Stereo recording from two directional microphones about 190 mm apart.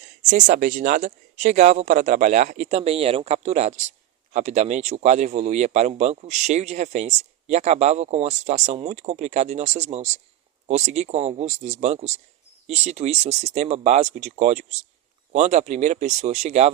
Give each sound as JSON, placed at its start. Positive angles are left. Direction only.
{"t": 0.2, "sound": "speech", "side_deg": -40}